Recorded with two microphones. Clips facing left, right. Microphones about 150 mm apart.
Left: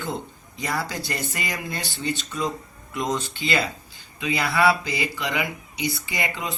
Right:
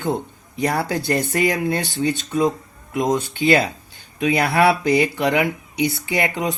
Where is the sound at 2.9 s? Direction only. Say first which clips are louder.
Right 6 dB; 55° right (ahead or behind).